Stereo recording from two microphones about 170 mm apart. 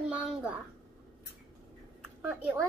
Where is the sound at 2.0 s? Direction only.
10° right (ahead or behind).